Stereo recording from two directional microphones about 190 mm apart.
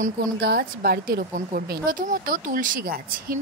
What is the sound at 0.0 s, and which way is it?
A woman's voice, 55° right (ahead or behind).